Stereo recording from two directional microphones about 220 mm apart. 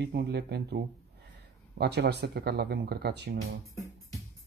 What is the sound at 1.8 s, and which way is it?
Speech, 45° right (ahead or behind).